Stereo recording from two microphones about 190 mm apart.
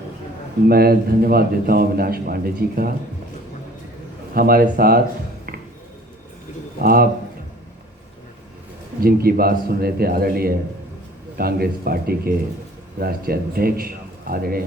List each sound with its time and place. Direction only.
0.7 s a man's voice: 55° right (ahead or behind)
4.4 s a man's voice: 50° right (ahead or behind)
6.8 s a man's voice: 50° right (ahead or behind)
9.0 s a man's voice: 55° right (ahead or behind)